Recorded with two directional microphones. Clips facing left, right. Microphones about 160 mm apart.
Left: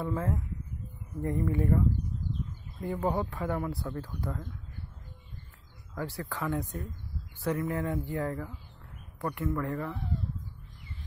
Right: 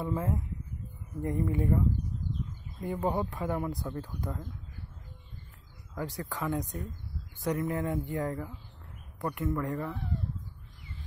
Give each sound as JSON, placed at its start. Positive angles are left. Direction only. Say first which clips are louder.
{"t": 0.0, "sound": "speech", "louder": "even", "side_deg": -15}
{"t": 2.2, "sound": "bird", "louder": "even", "side_deg": -50}
{"t": 2.8, "sound": "speech", "louder": "even", "side_deg": -15}
{"t": 5.9, "sound": "speech", "louder": "even", "side_deg": -20}